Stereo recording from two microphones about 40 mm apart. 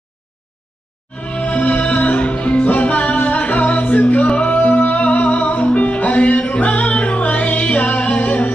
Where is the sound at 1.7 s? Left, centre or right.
Left.